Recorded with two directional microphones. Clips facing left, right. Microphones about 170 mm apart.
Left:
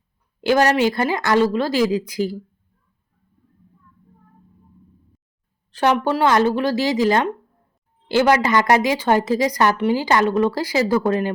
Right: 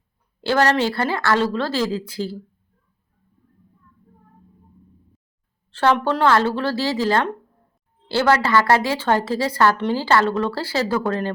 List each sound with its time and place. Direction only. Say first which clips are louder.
0.4 s a woman's voice: left 2 dB; 15° left (ahead or behind)
5.7 s a woman's voice: even; 15° left (ahead or behind)